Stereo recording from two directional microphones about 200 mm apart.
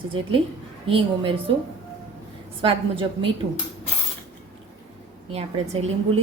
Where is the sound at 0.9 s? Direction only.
25° right (ahead or behind).